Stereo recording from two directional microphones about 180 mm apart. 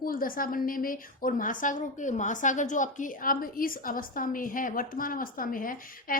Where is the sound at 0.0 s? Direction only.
50° left (ahead or behind).